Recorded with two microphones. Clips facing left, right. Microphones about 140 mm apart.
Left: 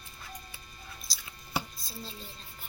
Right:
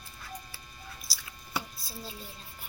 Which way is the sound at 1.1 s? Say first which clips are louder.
Left 2 dB; 5° right (ahead or behind).